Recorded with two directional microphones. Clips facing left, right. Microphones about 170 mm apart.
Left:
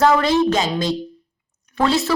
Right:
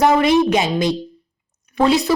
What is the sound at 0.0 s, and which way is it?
A woman's voice, 20° right (ahead or behind).